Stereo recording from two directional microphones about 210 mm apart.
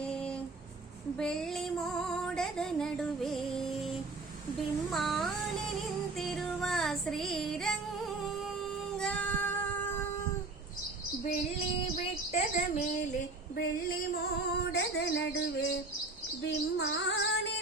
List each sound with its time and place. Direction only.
0.0 s a sound: 5° left (ahead or behind)
1.2 s music: 5° left (ahead or behind)
6.1 s child singing: 5° left (ahead or behind)
9.0 s child singing: 5° left (ahead or behind)
12.3 s speech: 30° left (ahead or behind); by 15.7 s 55° left (ahead or behind)
16.4 s female singing: 55° left (ahead or behind)